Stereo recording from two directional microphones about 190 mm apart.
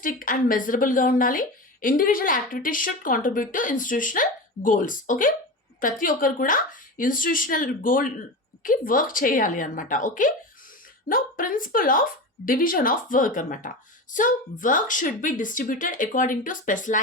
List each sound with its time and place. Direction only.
0.0 s a woman's voice: 45° left (ahead or behind)